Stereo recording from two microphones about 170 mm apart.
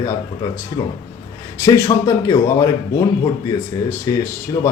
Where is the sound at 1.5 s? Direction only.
15° left (ahead or behind).